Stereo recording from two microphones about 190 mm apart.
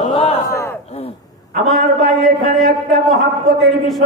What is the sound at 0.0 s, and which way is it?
Battle cry, 30° left (ahead or behind).